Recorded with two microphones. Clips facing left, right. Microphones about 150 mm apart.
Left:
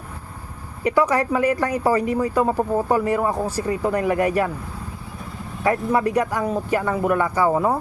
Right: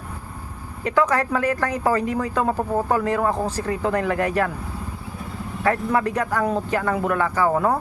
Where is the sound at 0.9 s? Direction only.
10° left (ahead or behind).